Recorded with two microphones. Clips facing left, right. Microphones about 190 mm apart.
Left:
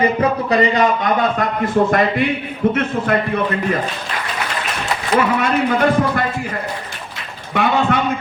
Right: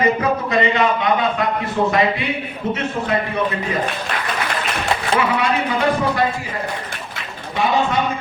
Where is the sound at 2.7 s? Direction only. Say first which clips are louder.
Left 3 dB; 55° left (ahead or behind).